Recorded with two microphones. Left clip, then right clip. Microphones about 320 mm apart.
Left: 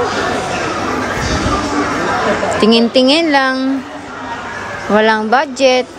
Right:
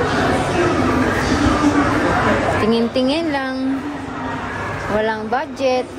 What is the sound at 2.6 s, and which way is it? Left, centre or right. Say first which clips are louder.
A woman's voice: left 7 dB; left.